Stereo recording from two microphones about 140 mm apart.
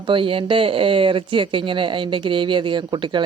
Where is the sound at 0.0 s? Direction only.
40° right (ahead or behind).